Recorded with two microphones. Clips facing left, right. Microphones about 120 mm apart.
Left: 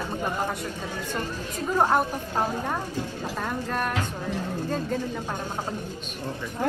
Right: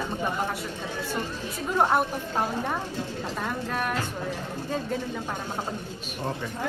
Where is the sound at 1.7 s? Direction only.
Centre (ahead or behind).